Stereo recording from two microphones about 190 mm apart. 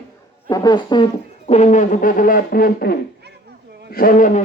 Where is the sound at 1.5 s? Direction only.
35° left (ahead or behind).